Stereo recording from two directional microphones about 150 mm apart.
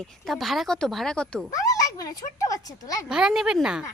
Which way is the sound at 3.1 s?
5° right (ahead or behind).